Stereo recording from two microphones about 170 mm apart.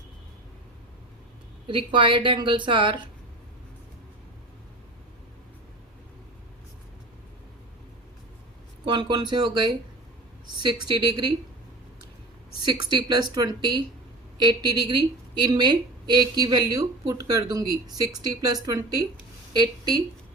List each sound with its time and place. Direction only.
1.6 s a woman's voice: 30° right (ahead or behind)
8.8 s a woman's voice: 25° right (ahead or behind)
12.6 s a woman's voice: 25° right (ahead or behind)